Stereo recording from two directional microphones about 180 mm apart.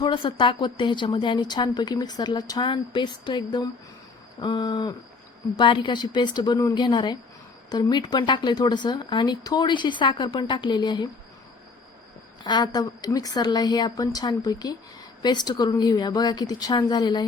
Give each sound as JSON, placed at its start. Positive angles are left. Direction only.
{"t": 0.0, "sound": "a woman's voice", "side_deg": 25}
{"t": 12.4, "sound": "a woman's voice", "side_deg": 25}